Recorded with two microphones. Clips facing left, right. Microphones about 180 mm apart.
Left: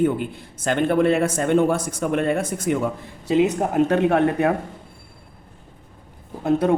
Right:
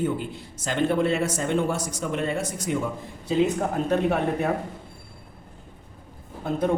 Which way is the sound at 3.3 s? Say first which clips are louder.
Left 4 dB; 70° left (ahead or behind).